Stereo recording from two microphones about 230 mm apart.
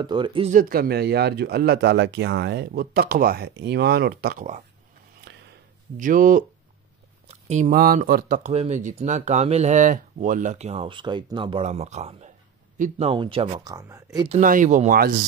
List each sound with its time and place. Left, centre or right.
0.0 s speech: right
0.6 s speech: right
5.9 s speech: right
13.1 s speech: right
14.4 s speech: right